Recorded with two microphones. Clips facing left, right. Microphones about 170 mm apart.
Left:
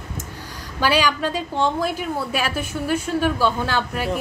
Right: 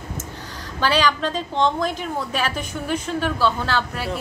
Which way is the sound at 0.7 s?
10° left (ahead or behind).